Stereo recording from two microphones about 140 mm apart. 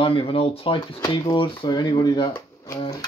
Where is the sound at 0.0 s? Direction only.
40° left (ahead or behind).